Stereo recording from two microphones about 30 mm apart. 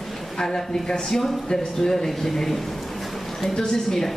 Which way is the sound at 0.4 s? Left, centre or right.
Centre.